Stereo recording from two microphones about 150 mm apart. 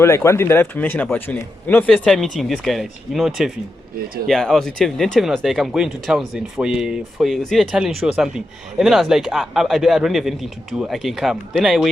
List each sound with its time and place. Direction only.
0.0 s speech: 20° left (ahead or behind); by 11.9 s centre (ahead or behind)